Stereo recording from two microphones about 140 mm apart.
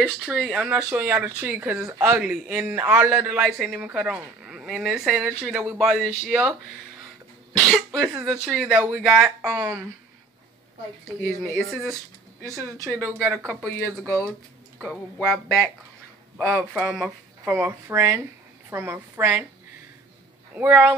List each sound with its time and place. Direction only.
0.0 s a man's voice: 5° right (ahead or behind)
7.5 s speech: centre (ahead or behind)
9.5 s speech: 25° right (ahead or behind)
11.5 s speech: centre (ahead or behind)
13.5 s speech: centre (ahead or behind)
17.5 s a man's voice: 20° right (ahead or behind)
20.5 s a man's voice: 10° right (ahead or behind)